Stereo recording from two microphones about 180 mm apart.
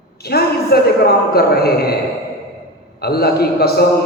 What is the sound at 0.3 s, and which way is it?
A woman's voice, 60° left (ahead or behind).